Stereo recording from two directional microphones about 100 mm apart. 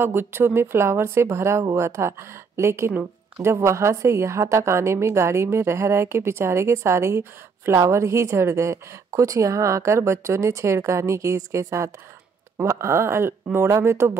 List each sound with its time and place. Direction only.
0.0 s a woman's voice: 25° right (ahead or behind)
2.9 s speech: 10° right (ahead or behind)
3.4 s a woman's voice: 30° right (ahead or behind)